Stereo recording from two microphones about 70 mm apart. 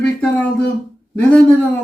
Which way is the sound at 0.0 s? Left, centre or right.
Centre.